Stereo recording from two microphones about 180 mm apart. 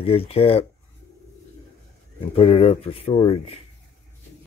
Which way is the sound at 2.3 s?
30° left (ahead or behind).